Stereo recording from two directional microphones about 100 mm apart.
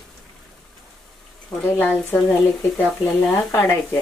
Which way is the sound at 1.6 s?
20° left (ahead or behind).